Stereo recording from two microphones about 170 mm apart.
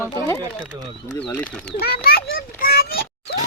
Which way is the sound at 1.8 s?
65° left (ahead or behind).